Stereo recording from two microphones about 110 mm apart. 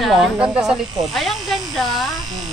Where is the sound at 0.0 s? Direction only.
Centre (ahead or behind).